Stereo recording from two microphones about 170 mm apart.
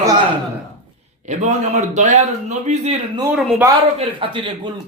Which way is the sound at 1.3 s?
40° right (ahead or behind).